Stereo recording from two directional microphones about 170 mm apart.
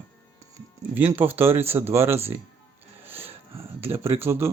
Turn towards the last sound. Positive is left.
turn(degrees=-15)  # may be behind; listen again after turning